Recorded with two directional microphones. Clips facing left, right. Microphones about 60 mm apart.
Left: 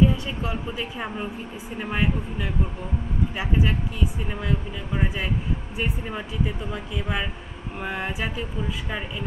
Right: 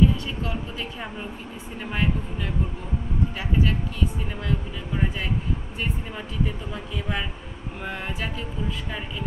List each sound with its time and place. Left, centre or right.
0.0 s speech: centre